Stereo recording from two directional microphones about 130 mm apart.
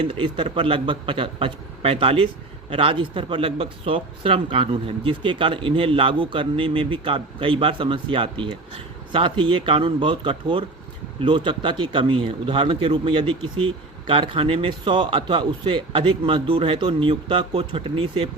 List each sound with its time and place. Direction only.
0.0 s a man's voice: 45° right (ahead or behind)